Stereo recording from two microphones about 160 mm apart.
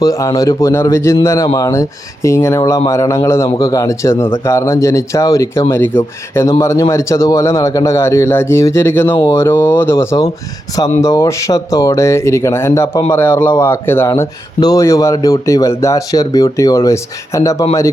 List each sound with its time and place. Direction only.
0.0 s a man's voice: 20° left (ahead or behind)